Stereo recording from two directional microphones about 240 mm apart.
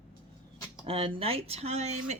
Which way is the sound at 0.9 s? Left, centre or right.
Right.